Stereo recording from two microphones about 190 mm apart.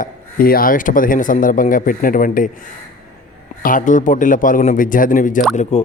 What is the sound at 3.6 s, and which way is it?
A man's voice, 45° left (ahead or behind).